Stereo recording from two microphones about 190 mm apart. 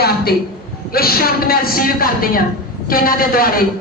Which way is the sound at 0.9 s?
50° left (ahead or behind).